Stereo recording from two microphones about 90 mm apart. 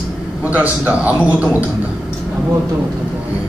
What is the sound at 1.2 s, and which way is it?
Speech, 15° right (ahead or behind).